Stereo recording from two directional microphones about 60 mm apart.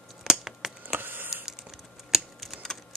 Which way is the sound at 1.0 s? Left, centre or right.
Right.